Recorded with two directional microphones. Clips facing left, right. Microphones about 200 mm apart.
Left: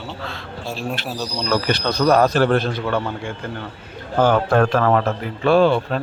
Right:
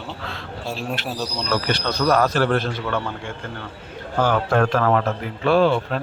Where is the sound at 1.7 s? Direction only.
15° left (ahead or behind).